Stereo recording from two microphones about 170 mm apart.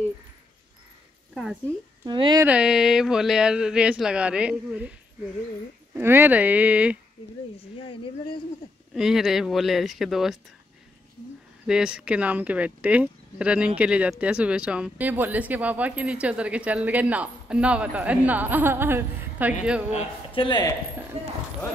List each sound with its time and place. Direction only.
1.3 s a woman's voice: 5° right (ahead or behind)
2.0 s speech: 25° right (ahead or behind)
2.4 s speech: 5° right (ahead or behind)
5.9 s speech: 10° right (ahead or behind)
7.9 s speech: 30° left (ahead or behind)
8.9 s speech: centre (ahead or behind)
11.6 s speech: 5° right (ahead or behind)
19.9 s speech: 40° left (ahead or behind)
20.4 s speech: 25° left (ahead or behind)
21.1 s speech: 35° right (ahead or behind)